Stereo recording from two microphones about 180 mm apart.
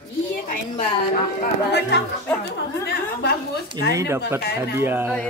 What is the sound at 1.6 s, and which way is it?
Speech, 70° left (ahead or behind).